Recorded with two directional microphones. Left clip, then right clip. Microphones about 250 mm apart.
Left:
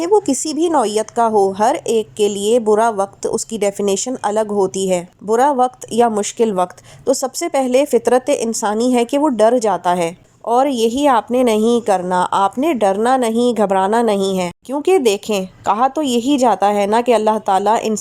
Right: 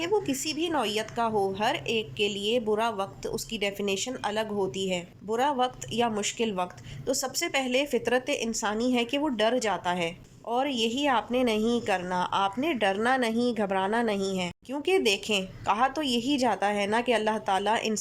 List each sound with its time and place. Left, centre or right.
0.0 s a woman's voice: left